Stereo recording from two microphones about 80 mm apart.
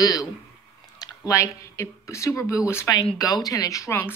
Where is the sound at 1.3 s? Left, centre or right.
Left.